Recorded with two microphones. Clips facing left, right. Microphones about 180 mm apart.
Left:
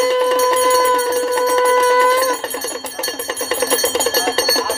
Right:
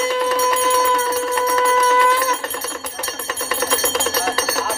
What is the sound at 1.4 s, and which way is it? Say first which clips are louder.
Music: left 4 dB; 30° left (ahead or behind).